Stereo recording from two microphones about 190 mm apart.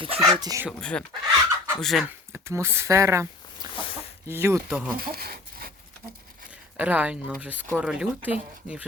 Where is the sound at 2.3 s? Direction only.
15° right (ahead or behind).